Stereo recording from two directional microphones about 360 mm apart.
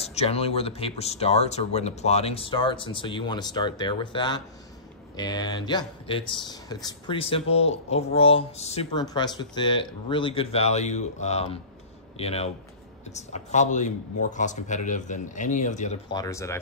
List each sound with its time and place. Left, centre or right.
0.0 s a man's voice: centre